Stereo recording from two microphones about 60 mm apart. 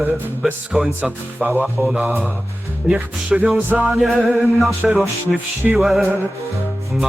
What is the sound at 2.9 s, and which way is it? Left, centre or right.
Speech, centre.